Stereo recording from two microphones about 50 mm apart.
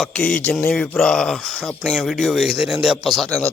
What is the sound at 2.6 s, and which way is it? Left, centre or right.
Speech, centre.